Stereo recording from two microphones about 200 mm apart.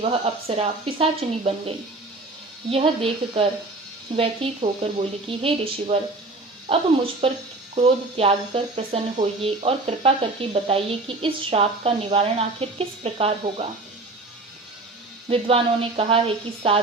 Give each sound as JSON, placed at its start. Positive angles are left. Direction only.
{"t": 0.0, "sound": "speech", "side_deg": -30}
{"t": 2.6, "sound": "speech", "side_deg": -30}
{"t": 15.3, "sound": "speech", "side_deg": -30}